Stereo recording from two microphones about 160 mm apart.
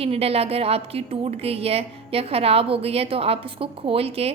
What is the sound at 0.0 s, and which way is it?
A woman's voice, 40° right (ahead or behind).